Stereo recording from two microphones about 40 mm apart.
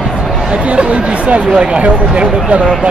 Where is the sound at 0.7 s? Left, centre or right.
Right.